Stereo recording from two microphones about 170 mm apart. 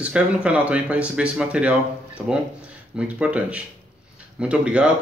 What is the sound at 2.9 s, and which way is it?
A man's voice, 5° right (ahead or behind).